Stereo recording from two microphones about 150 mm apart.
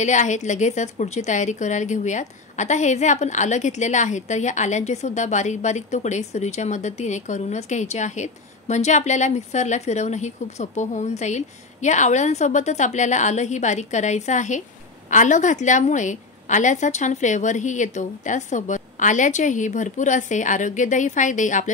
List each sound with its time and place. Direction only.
0.0 s a woman's voice: 55° left (ahead or behind)